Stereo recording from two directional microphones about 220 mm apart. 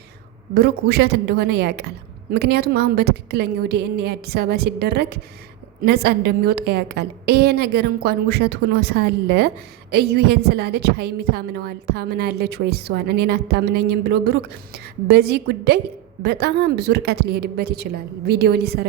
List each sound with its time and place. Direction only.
0.5 s a woman's voice: 45° right (ahead or behind)